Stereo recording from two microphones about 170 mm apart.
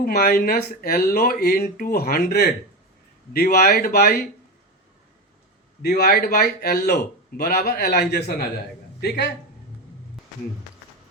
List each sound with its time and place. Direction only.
0.0 s a man's voice: 65° left (ahead or behind)
5.8 s a man's voice: 65° left (ahead or behind)